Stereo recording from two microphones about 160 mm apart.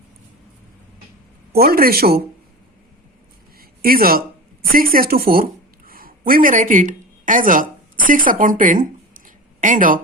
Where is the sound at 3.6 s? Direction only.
65° right (ahead or behind).